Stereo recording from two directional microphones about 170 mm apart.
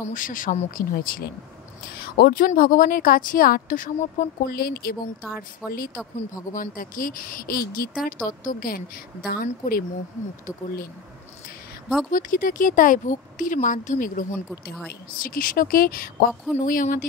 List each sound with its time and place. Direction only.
0.1 s speech: 50° left (ahead or behind)
2.0 s a woman's voice: 70° left (ahead or behind)
5.6 s speech: 5° right (ahead or behind)
6.1 s a woman's voice: 50° left (ahead or behind)
12.1 s a woman's voice: 55° left (ahead or behind)